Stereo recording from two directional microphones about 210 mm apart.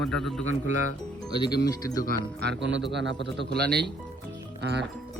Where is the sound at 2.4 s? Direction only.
55° right (ahead or behind).